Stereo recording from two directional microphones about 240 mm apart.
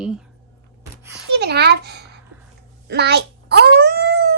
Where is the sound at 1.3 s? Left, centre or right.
Right.